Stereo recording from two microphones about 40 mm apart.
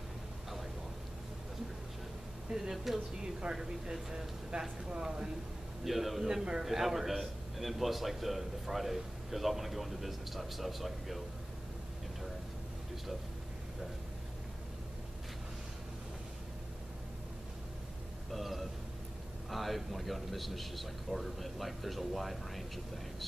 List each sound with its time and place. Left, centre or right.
2.5 s speech: centre
5.9 s a man's voice: centre
6.2 s a man's voice: centre
18.3 s a sound: centre
19.5 s speech: centre